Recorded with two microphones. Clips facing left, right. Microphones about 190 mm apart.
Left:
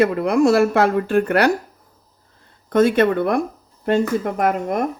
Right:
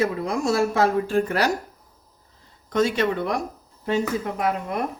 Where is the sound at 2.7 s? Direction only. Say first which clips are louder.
Left 6 dB; 55° left (ahead or behind).